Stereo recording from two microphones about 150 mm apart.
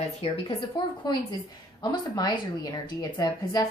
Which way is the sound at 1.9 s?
25° left (ahead or behind).